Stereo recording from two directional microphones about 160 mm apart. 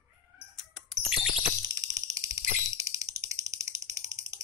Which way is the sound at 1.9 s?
20° right (ahead or behind).